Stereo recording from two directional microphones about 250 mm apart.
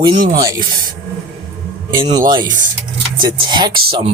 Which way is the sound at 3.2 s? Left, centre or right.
Centre.